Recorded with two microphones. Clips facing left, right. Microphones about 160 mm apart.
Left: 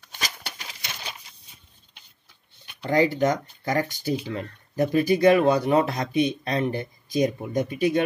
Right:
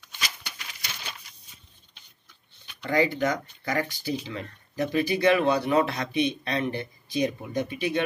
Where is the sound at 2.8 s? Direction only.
40° left (ahead or behind).